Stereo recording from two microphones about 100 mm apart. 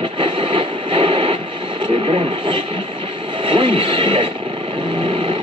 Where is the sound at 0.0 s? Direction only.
55° right (ahead or behind).